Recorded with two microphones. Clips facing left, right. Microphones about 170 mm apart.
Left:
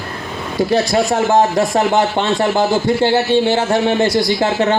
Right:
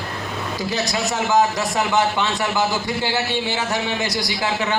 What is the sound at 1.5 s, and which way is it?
A man's voice, 50° left (ahead or behind).